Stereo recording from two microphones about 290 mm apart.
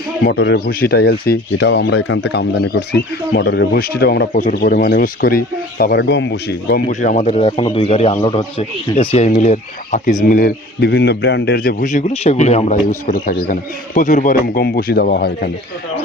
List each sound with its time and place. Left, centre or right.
0.3 s a man's voice: left